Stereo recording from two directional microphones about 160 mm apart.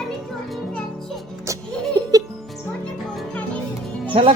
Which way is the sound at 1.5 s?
20° right (ahead or behind).